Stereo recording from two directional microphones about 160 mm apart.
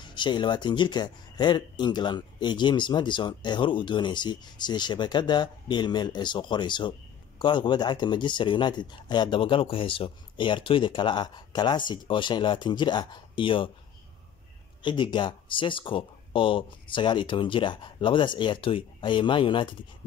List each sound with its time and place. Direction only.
0.0 s speech: 30° left (ahead or behind)
14.8 s speech: 30° left (ahead or behind)